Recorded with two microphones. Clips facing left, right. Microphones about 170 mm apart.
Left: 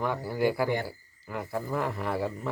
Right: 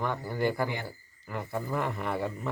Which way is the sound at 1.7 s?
Centre (ahead or behind).